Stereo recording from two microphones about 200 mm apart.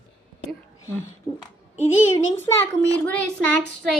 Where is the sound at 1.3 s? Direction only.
10° left (ahead or behind).